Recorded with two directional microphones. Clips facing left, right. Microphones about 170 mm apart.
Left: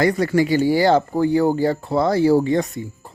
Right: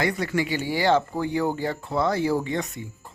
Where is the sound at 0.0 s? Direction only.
40° left (ahead or behind).